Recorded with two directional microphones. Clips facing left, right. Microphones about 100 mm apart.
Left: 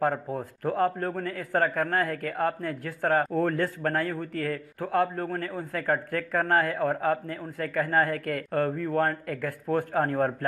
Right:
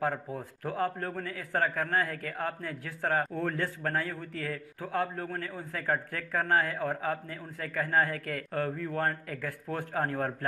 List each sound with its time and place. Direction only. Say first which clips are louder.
0.0 s a man's voice: left 5 dB; 45° left (ahead or behind)